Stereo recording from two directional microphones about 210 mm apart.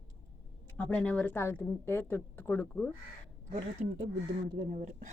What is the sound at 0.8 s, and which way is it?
A woman's voice, 5° left (ahead or behind).